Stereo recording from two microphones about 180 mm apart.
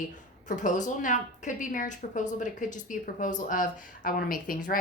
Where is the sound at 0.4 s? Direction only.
45° left (ahead or behind).